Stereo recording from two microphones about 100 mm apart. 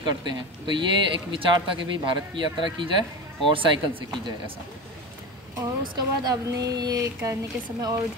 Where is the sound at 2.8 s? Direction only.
55° right (ahead or behind).